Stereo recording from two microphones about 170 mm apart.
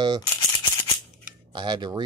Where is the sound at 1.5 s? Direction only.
25° right (ahead or behind).